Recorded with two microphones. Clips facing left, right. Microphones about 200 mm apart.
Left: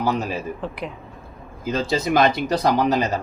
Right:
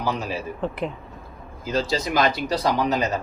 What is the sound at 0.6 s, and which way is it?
Speech, centre (ahead or behind).